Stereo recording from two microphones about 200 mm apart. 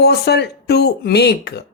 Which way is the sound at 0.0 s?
55° left (ahead or behind).